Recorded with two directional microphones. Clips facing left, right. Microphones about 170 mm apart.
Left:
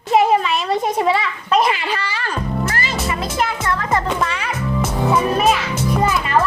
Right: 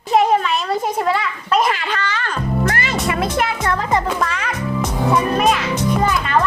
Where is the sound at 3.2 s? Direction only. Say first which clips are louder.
Right 1 dB; 60° right (ahead or behind).